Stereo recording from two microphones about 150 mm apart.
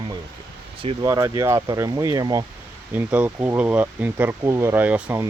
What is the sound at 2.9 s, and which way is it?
Speech, 10° right (ahead or behind).